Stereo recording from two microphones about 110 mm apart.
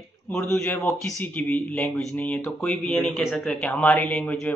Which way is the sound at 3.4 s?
10° left (ahead or behind).